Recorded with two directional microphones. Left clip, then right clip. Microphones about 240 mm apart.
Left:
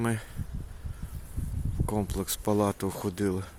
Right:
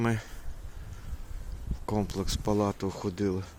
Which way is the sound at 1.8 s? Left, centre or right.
Centre.